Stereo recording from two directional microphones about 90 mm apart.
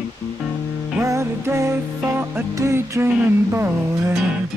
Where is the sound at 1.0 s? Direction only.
35° right (ahead or behind).